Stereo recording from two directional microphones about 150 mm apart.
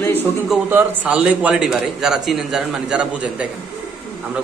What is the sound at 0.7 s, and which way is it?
A man's voice, 15° right (ahead or behind).